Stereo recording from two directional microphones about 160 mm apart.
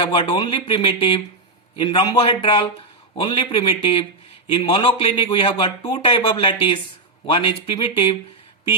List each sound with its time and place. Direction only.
0.0 s a man's voice: 30° left (ahead or behind)